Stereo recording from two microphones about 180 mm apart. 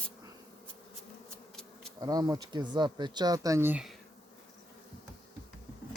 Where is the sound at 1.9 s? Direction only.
20° right (ahead or behind).